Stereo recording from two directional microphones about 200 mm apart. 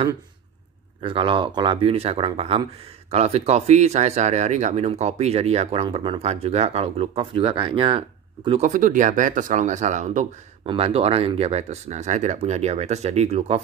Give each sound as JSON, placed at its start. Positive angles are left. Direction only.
{"t": 1.0, "sound": "speech", "side_deg": -25}
{"t": 8.5, "sound": "speech", "side_deg": -35}